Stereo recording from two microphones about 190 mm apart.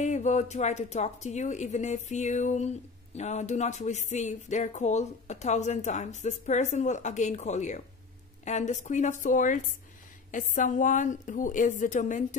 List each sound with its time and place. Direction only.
0.0 s a woman's voice: 35° left (ahead or behind)